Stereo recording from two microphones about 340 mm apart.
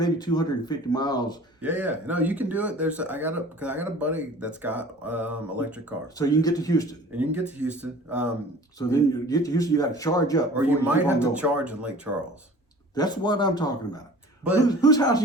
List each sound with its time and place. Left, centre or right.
0.0 s a man's voice: centre
1.6 s speech: centre
6.1 s a man's voice: centre
7.1 s speech: centre
8.9 s a man's voice: centre
10.5 s speech: centre
12.9 s a man's voice: centre